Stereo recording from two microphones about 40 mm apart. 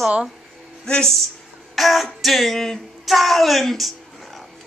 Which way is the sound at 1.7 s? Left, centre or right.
Centre.